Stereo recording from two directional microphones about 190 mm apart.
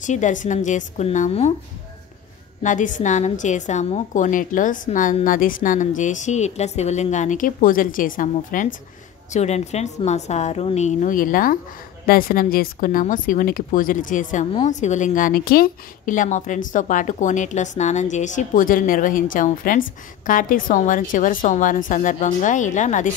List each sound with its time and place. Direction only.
0.0 s a woman's voice: 40° left (ahead or behind)
2.6 s a woman's voice: 40° left (ahead or behind)